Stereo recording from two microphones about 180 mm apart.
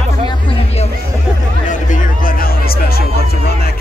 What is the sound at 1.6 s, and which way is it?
Music, 45° left (ahead or behind).